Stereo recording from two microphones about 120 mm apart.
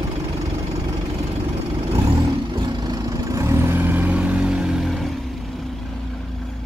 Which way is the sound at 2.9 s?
25° right (ahead or behind).